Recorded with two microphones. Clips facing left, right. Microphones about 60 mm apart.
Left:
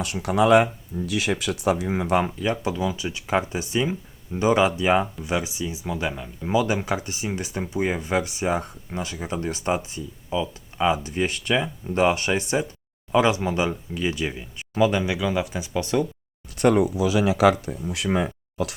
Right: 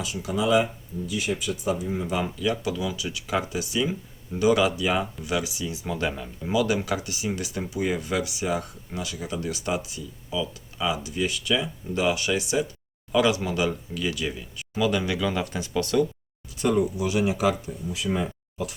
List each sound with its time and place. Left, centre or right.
0.0 s speech: left
2.2 s speech: left
5.8 s speech: centre
6.5 s speech: left
16.6 s speech: left
17.3 s speech: left